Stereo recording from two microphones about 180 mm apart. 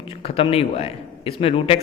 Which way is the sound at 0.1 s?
30° left (ahead or behind).